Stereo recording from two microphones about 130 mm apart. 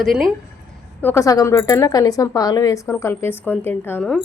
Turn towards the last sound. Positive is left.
turn(degrees=10)  # may be behind; listen again after turning